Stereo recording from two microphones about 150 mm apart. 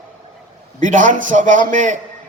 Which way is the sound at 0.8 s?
60° right (ahead or behind).